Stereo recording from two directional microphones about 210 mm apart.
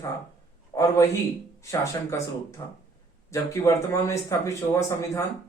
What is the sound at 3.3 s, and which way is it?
Speech, 15° left (ahead or behind).